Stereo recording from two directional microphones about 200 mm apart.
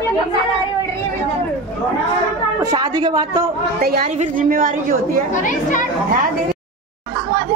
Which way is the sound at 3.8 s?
45° right (ahead or behind).